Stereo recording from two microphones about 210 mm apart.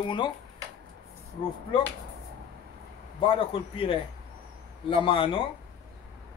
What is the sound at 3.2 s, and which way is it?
A man's voice, 25° left (ahead or behind).